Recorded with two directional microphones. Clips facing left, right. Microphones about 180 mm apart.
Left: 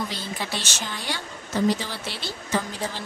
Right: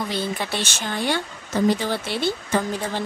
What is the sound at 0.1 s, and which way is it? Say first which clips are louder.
Speech: right 5 dB; 55° right (ahead or behind).